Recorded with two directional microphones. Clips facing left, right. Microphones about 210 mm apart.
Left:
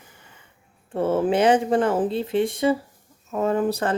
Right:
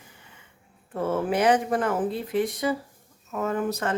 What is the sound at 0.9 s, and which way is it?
Speech, 30° left (ahead or behind).